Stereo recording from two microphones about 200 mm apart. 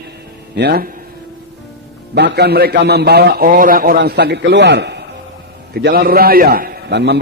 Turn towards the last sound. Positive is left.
turn(degrees=-60)  # may be behind; listen again after turning